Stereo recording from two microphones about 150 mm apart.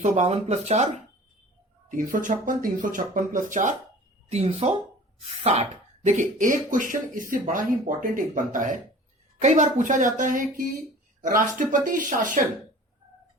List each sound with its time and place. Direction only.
0.0 s speech: 50° right (ahead or behind)
1.9 s speech: 60° right (ahead or behind)
4.3 s speech: 45° right (ahead or behind)
6.1 s speech: 60° right (ahead or behind)